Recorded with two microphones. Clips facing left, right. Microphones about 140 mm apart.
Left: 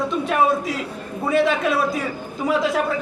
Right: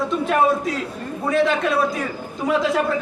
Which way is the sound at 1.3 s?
Centre (ahead or behind).